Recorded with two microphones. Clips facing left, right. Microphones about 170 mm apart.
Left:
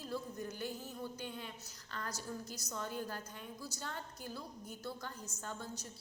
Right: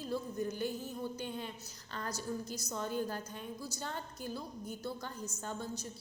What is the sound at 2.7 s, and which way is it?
A woman's voice, 25° right (ahead or behind).